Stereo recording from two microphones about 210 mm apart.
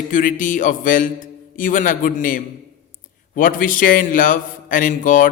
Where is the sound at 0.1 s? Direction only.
40° left (ahead or behind).